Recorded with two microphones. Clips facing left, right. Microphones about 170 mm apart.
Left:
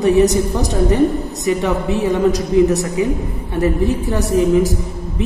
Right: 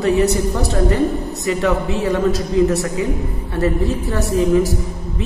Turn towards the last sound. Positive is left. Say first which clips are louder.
# left 1 dB
turn(degrees=20)  # may be behind; listen again after turning